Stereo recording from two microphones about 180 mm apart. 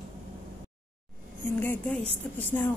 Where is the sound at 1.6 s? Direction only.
10° left (ahead or behind).